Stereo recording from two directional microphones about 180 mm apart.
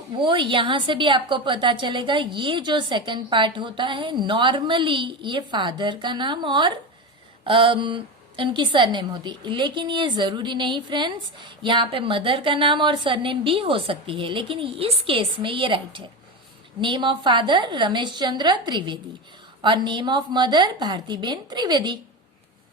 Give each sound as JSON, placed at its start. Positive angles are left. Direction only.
{"t": 0.2, "sound": "a woman's voice", "side_deg": -25}